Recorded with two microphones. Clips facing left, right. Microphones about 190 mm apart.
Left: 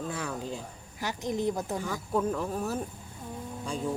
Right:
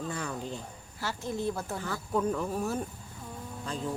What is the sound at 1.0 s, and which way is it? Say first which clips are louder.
Speech: left 3 dB; 15° left (ahead or behind).